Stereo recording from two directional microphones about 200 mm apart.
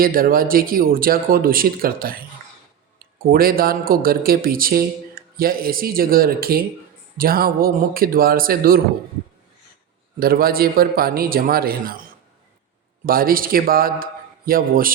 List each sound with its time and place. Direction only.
0.0 s speech: 45° right (ahead or behind)
3.2 s speech: 50° right (ahead or behind)
10.2 s speech: 45° right (ahead or behind)
13.1 s speech: 45° right (ahead or behind)